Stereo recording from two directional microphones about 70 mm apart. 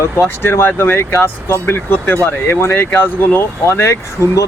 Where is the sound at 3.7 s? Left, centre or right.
Left.